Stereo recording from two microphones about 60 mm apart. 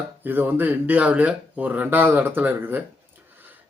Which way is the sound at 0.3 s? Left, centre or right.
Right.